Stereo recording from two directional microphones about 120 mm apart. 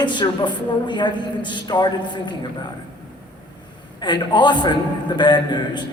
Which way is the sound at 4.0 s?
40° left (ahead or behind).